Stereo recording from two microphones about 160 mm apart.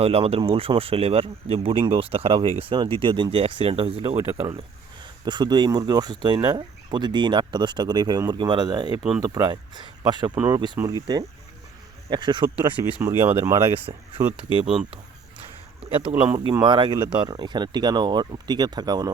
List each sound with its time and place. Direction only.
0.0 s speech: 40° right (ahead or behind)
13.0 s speech: 15° right (ahead or behind)
13.9 s speech: 30° right (ahead or behind)
15.8 s speech: 35° right (ahead or behind)